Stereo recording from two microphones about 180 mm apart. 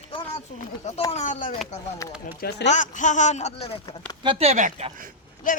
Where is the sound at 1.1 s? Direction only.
45° left (ahead or behind).